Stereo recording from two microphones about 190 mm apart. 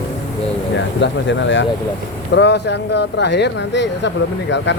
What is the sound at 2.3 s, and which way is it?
Speech, 65° left (ahead or behind).